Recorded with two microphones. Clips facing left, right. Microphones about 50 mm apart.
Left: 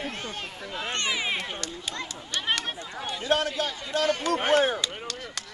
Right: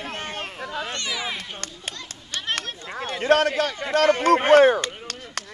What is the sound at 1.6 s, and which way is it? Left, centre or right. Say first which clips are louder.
A man's voice: left 1 dB; right.